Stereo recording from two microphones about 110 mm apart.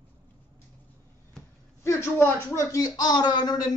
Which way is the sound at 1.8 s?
25° left (ahead or behind).